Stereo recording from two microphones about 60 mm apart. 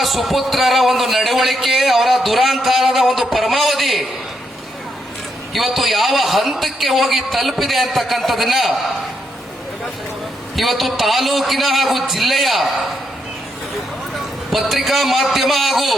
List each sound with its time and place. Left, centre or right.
0.0 s a man's voice: centre
5.5 s a man's voice: centre
10.5 s a man's voice: centre
14.5 s a man's voice: centre